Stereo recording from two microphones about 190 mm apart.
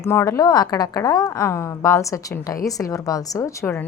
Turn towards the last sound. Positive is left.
turn(degrees=15)  # may be behind; listen again after turning